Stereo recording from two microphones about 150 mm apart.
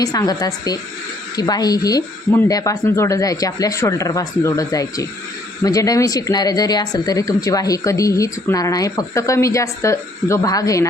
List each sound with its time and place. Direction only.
0.0 s speech: 25° left (ahead or behind)